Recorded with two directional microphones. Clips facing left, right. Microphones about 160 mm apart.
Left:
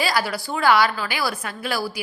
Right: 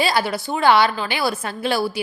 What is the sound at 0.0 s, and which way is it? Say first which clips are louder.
A woman's voice: right 3 dB; 25° right (ahead or behind).